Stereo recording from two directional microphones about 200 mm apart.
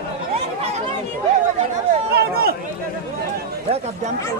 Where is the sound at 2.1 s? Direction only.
50° right (ahead or behind).